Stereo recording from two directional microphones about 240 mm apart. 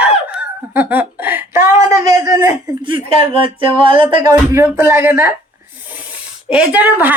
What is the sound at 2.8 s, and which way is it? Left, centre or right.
Music, right.